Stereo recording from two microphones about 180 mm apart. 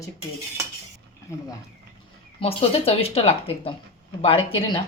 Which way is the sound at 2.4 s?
30° left (ahead or behind).